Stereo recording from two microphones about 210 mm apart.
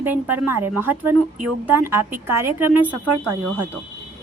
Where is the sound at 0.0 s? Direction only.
10° right (ahead or behind).